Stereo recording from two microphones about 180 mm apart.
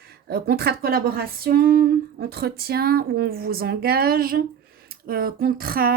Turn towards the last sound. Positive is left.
turn(degrees=-55)  # may be behind; listen again after turning